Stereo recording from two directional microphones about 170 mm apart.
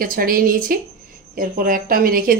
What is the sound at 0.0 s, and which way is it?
Speech, 60° right (ahead or behind).